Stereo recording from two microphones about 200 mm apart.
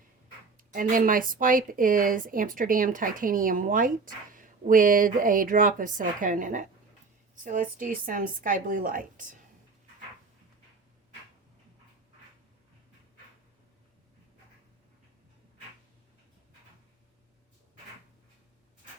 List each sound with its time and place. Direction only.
0.5 s speech: 45° right (ahead or behind)